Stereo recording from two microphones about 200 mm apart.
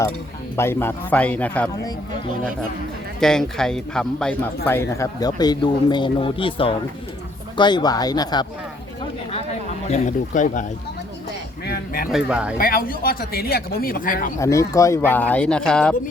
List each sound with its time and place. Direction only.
0.5 s a man's voice: 10° left (ahead or behind)
3.2 s a man's voice: 5° left (ahead or behind); by 8.4 s 20° left (ahead or behind)
9.9 s speech: 40° left (ahead or behind)
11.6 s speech: 55° left (ahead or behind)
12.1 s speech: 5° right (ahead or behind)
12.5 s speech: 45° left (ahead or behind)
14.3 s a man's voice: 15° left (ahead or behind)